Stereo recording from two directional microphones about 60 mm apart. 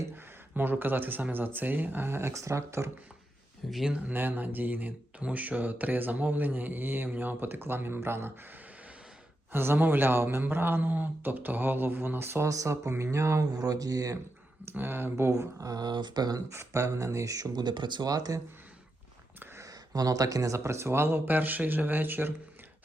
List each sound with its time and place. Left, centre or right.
0.5 s speech: right
2.3 s speech: right
3.7 s speech: centre
4.1 s speech: right
9.5 s speech: right
12.5 s speech: right
13.5 s speech: right
14.6 s speech: right
15.3 s speech: right
16.5 s speech: right
18.0 s speech: right
19.6 s speech: right
20.7 s speech: right
21.2 s speech: right